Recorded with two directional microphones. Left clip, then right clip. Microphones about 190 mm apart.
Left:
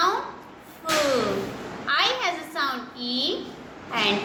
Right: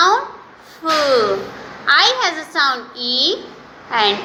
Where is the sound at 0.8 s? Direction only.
25° right (ahead or behind).